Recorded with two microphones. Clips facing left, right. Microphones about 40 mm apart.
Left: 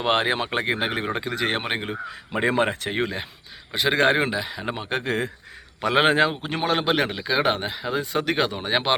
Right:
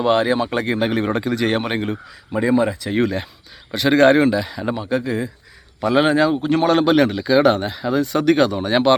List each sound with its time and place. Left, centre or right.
0.0 s speech: left
0.5 s speech: left
1.1 s speech: centre
2.0 s speech: left
2.9 s speech: centre
4.7 s speech: left
5.8 s speech: left
6.3 s speech: centre